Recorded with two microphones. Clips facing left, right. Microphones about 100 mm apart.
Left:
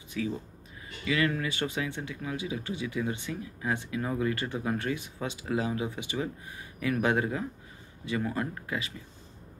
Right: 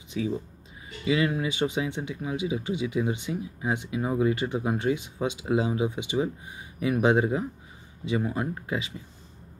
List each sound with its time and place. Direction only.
1.0 s speech: 20° right (ahead or behind)